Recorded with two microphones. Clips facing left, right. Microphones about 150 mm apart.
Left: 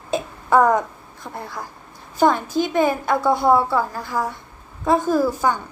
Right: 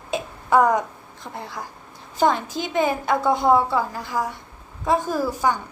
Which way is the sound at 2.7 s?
15° right (ahead or behind).